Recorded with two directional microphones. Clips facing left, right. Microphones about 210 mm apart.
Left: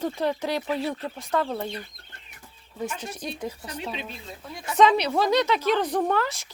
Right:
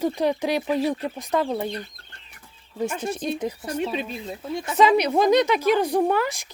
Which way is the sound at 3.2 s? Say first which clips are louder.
Right 7 dB; 25° right (ahead or behind).